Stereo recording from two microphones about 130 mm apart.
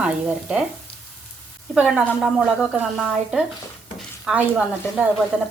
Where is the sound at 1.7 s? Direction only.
5° right (ahead or behind).